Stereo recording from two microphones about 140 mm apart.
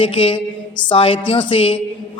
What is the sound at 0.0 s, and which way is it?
A man's voice, 40° left (ahead or behind).